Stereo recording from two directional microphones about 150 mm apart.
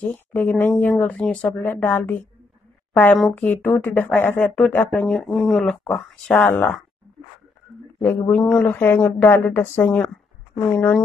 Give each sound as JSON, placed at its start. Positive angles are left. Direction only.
{"t": 0.1, "sound": "speech", "side_deg": 10}
{"t": 3.2, "sound": "speech", "side_deg": 0}
{"t": 3.4, "sound": "speech", "side_deg": 10}
{"t": 8.0, "sound": "speech", "side_deg": 10}